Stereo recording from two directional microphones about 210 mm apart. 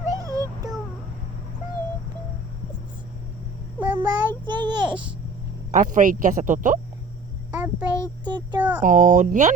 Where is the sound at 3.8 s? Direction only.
10° right (ahead or behind).